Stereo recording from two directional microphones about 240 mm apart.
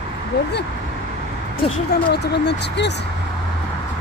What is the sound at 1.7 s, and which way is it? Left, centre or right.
Speech, left.